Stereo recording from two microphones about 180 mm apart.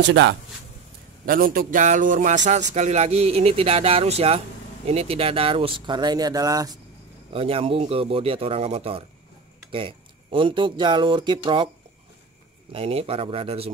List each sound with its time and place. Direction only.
0.0 s speech: 80° right
1.2 s a man's voice: 55° right (ahead or behind); by 6.8 s 20° right (ahead or behind)
7.3 s speech: 30° right (ahead or behind)
12.7 s speech: 30° right (ahead or behind)